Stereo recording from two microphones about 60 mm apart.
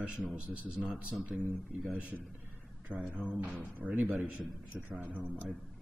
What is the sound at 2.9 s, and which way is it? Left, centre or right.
Speech, left.